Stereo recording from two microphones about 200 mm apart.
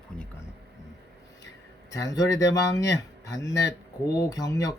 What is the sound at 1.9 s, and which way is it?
Speech, 15° left (ahead or behind).